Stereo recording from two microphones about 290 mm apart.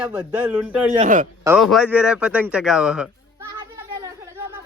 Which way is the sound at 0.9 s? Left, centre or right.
Right.